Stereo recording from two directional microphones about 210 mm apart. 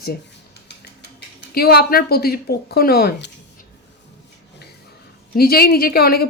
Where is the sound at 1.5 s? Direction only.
45° left (ahead or behind).